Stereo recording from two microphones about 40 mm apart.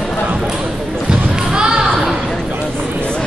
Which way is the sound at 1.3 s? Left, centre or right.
Right.